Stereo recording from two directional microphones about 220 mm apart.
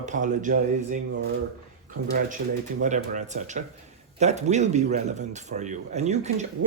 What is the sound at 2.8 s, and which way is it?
Speech, 35° right (ahead or behind).